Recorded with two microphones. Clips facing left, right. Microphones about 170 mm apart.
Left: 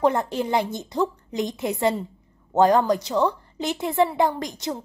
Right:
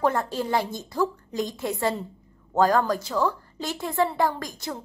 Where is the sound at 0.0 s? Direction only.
20° left (ahead or behind).